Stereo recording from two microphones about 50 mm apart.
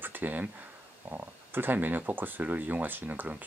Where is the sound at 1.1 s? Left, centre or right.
Right.